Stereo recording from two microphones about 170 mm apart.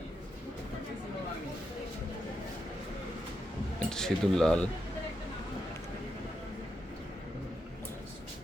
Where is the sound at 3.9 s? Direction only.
5° left (ahead or behind).